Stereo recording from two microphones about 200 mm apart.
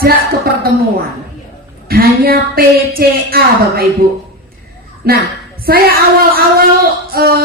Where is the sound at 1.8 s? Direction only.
50° right (ahead or behind).